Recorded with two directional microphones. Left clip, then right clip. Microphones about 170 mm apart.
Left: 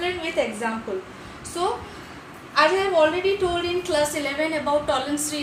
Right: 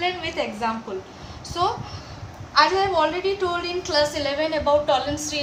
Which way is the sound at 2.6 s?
20° right (ahead or behind).